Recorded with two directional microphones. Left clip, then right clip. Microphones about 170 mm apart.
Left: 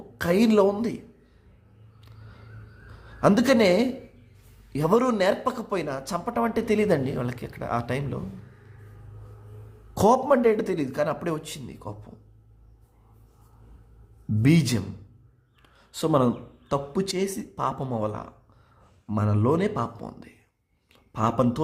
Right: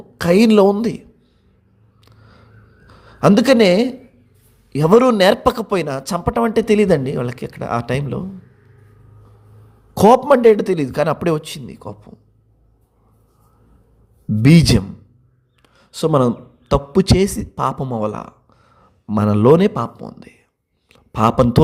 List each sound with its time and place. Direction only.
0.2 s speech: 40° right (ahead or behind)
2.0 s a sound: 30° right (ahead or behind)
2.8 s a man's voice: 35° right (ahead or behind)
9.9 s speech: 35° right (ahead or behind)
14.4 s a man's voice: 40° right (ahead or behind)
15.6 s a man's voice: 30° right (ahead or behind)
17.8 s a sound: 30° right (ahead or behind)
19.2 s a man's voice: 50° right (ahead or behind)
20.0 s speech: 30° right (ahead or behind)
20.9 s speech: 40° right (ahead or behind)